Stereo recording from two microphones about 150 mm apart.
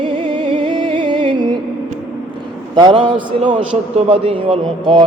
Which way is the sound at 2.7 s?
30° right (ahead or behind).